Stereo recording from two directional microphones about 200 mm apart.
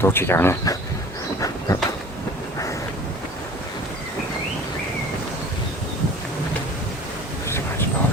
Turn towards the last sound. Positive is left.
turn(degrees=10)  # may be behind; listen again after turning